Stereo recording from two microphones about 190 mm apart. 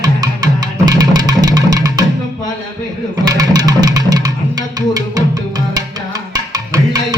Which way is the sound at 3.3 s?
20° right (ahead or behind).